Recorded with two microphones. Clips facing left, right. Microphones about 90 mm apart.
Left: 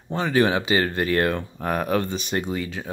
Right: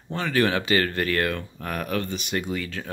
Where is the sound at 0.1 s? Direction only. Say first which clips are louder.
Left 3 dB; 20° left (ahead or behind).